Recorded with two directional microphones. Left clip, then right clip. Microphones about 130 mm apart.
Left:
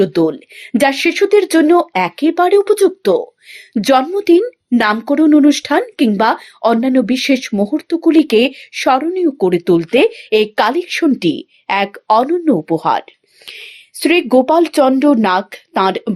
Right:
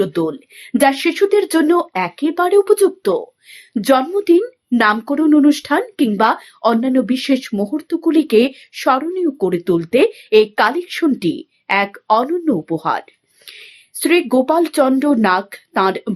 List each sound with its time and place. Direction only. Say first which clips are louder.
0.0 s speech: left 5 dB; 25° left (ahead or behind)